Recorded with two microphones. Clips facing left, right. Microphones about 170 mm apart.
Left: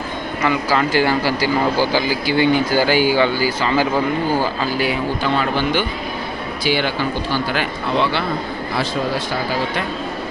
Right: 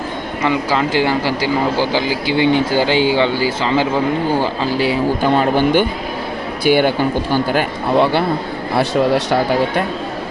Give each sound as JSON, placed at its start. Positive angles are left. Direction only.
{"t": 0.4, "sound": "speech", "side_deg": -20}
{"t": 5.2, "sound": "speech", "side_deg": -45}
{"t": 9.1, "sound": "speech", "side_deg": -60}